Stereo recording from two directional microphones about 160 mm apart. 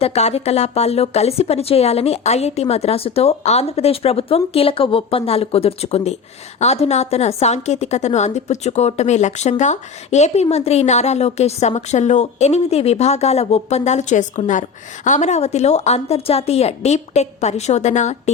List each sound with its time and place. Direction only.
0.0 s a woman's voice: 40° left (ahead or behind)